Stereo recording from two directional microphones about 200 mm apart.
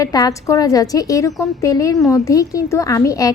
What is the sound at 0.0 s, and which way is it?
A woman's voice, 20° left (ahead or behind).